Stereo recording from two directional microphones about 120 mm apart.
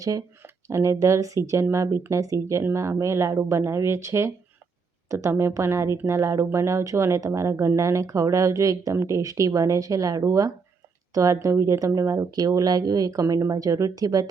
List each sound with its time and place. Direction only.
0.0 s speech: 25° right (ahead or behind)